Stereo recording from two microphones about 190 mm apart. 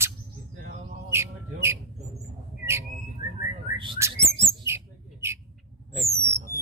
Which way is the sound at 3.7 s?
25° right (ahead or behind).